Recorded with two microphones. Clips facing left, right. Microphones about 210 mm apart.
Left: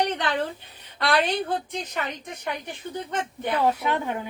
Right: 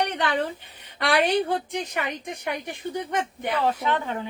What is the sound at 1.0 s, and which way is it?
A woman's voice, 15° right (ahead or behind).